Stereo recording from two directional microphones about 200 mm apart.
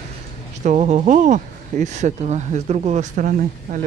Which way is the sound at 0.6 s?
35° right (ahead or behind).